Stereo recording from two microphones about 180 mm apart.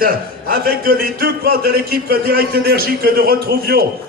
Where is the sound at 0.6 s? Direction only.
55° right (ahead or behind).